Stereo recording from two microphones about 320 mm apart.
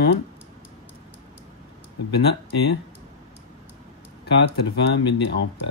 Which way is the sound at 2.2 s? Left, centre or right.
Left.